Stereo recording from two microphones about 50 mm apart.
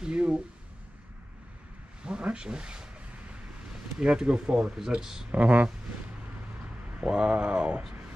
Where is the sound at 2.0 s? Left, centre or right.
Centre.